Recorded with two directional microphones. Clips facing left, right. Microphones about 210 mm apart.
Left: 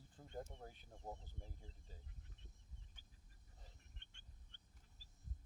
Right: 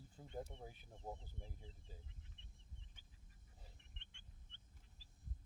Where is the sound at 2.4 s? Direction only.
45° left (ahead or behind).